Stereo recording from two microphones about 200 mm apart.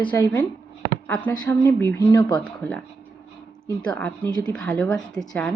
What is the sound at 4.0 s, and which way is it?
A woman's voice, 10° left (ahead or behind).